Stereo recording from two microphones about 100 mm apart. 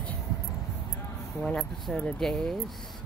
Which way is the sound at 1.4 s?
5° left (ahead or behind).